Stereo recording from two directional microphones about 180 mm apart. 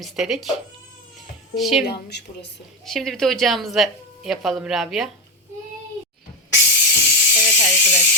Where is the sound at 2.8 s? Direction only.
Centre (ahead or behind).